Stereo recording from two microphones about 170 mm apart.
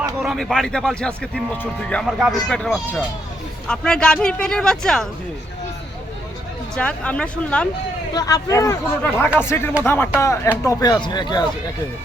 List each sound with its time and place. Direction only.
0.2 s speech: 5° right (ahead or behind)
6.7 s speech: 5° left (ahead or behind)
8.1 s speech: 20° left (ahead or behind)